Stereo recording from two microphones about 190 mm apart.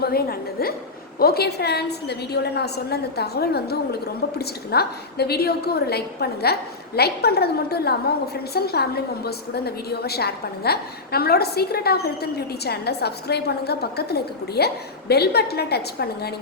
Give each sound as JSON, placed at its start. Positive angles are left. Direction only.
{"t": 0.0, "sound": "a woman's voice", "side_deg": 55}